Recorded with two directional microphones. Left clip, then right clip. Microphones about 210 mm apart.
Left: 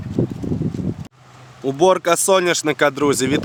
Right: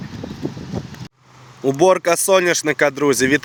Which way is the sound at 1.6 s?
5° right (ahead or behind).